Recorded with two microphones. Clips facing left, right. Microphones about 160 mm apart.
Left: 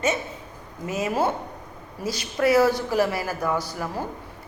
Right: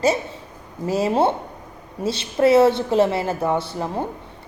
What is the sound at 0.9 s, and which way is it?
A woman's voice, 30° right (ahead or behind).